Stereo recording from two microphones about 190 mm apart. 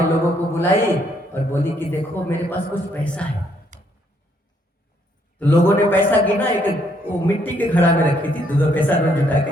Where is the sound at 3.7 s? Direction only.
40° right (ahead or behind).